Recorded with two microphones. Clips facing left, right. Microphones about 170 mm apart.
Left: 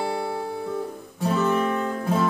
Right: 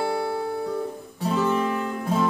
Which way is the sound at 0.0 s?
5° right (ahead or behind).